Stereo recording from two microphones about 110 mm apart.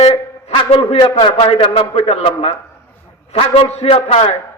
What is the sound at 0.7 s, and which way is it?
A man's voice, 60° left (ahead or behind).